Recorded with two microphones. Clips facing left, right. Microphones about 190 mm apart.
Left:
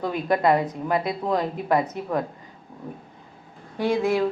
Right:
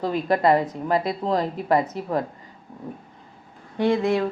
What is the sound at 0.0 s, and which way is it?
Speech, centre (ahead or behind).